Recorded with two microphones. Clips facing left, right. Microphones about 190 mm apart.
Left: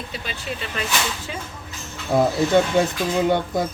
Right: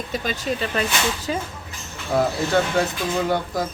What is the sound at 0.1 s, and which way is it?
Speech, 40° right (ahead or behind).